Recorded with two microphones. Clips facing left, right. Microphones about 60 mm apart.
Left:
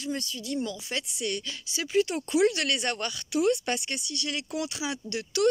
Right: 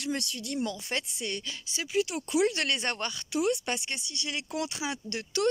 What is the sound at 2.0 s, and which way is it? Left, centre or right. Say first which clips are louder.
Speech: left 4 dB; centre.